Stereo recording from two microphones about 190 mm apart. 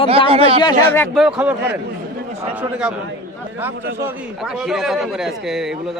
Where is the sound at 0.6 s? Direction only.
20° left (ahead or behind).